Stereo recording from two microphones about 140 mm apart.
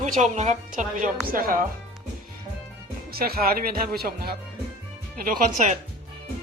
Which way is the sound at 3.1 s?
90° right.